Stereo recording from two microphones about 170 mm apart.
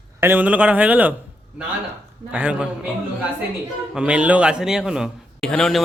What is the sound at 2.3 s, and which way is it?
Speech, 10° right (ahead or behind).